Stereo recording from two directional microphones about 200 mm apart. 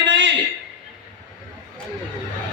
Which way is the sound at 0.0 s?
65° right (ahead or behind).